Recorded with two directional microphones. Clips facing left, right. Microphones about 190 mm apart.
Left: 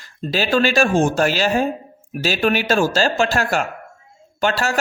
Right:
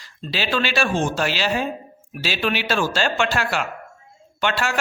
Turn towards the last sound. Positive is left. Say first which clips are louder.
# left 3 dB
turn(degrees=40)  # may be behind; listen again after turning